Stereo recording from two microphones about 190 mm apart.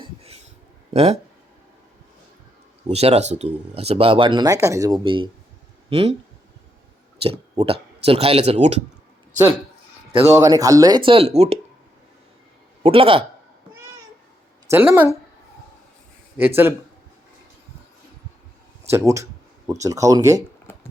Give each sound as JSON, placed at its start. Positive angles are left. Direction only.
{"t": 0.0, "sound": "a sound", "side_deg": -30}
{"t": 0.9, "sound": "speech", "side_deg": -35}
{"t": 2.8, "sound": "speech", "side_deg": -35}
{"t": 7.2, "sound": "speech", "side_deg": -30}
{"t": 10.2, "sound": "speech", "side_deg": -15}
{"t": 12.8, "sound": "a man's voice", "side_deg": -30}
{"t": 14.7, "sound": "speech", "side_deg": -10}
{"t": 18.8, "sound": "speech", "side_deg": -15}